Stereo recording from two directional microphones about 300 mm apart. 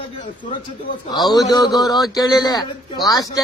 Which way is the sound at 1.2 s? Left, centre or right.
Centre.